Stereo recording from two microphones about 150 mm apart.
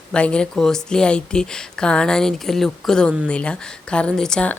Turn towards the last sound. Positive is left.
turn(degrees=5)  # may be behind; listen again after turning